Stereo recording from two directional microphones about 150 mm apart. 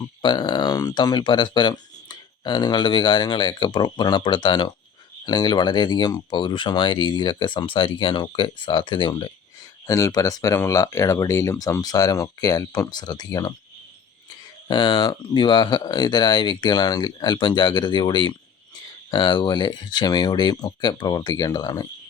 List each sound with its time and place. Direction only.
0.2 s speech: 30° left (ahead or behind)
14.7 s speech: 25° left (ahead or behind)